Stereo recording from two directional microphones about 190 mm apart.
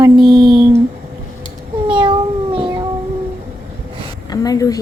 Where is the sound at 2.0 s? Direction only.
25° right (ahead or behind).